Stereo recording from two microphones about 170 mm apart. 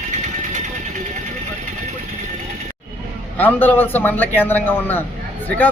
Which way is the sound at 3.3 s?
10° left (ahead or behind).